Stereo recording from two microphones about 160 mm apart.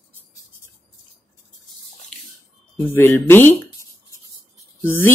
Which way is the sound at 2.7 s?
15° left (ahead or behind).